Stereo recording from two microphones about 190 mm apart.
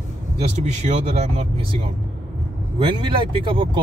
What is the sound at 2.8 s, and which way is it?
Speech, 25° right (ahead or behind).